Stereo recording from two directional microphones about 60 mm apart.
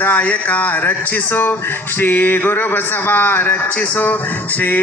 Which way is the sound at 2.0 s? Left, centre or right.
Left.